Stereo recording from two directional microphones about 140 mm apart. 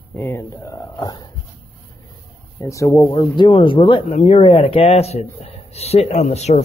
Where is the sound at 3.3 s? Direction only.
35° left (ahead or behind).